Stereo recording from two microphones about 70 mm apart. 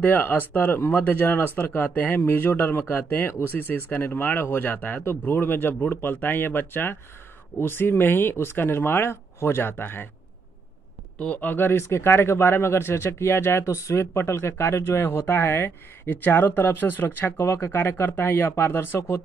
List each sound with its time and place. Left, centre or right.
0.0 s speech: left
11.1 s speech: centre
11.5 s speech: left